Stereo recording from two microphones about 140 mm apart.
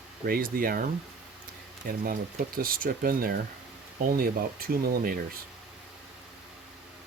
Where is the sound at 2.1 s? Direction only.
90° right.